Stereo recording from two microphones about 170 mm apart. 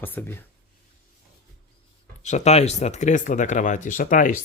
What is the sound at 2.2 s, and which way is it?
Speech, 40° left (ahead or behind).